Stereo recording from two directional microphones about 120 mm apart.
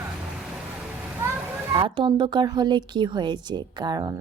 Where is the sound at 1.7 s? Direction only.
45° right (ahead or behind).